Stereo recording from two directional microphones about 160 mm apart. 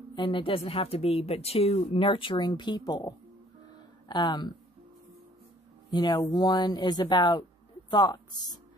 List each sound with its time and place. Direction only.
0.1 s a woman's voice: 30° left (ahead or behind)
3.7 s a sound: 25° left (ahead or behind)
5.9 s speech: 25° left (ahead or behind)